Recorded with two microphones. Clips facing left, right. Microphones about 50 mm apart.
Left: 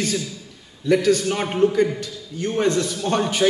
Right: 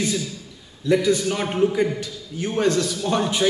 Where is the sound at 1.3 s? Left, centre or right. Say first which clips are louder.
Left 1 dB; centre.